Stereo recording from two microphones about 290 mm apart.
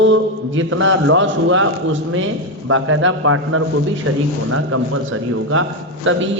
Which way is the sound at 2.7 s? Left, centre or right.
Right.